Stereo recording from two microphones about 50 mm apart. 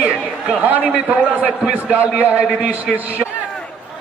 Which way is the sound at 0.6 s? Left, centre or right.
Right.